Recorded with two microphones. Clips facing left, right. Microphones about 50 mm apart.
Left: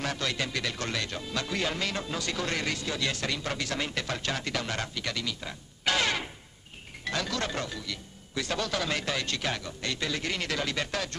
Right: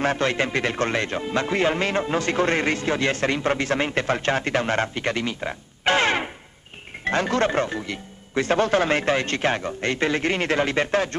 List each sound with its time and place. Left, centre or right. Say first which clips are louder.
0.0 s speech: right 10 dB; right